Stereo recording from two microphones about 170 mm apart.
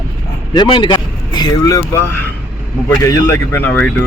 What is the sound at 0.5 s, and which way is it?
Speech, 25° left (ahead or behind).